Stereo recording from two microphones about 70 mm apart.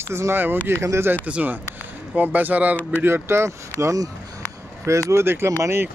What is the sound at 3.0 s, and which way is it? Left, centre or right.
Speech, right.